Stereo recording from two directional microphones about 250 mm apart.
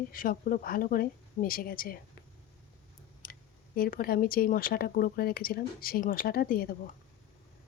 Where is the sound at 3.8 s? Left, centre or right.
Left.